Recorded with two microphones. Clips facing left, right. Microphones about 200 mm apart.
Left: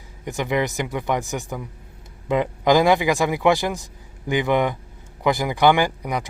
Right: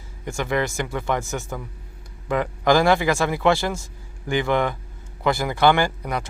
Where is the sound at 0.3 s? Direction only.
15° left (ahead or behind).